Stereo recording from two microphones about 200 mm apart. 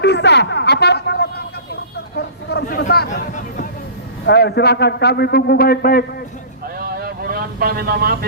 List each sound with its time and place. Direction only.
0.0 s a sound: 60° left (ahead or behind)
4.3 s a man's voice: 55° left (ahead or behind)
6.7 s vehicle: 50° right (ahead or behind)